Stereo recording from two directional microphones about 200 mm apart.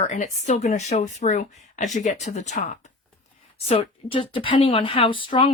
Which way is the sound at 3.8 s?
25° left (ahead or behind).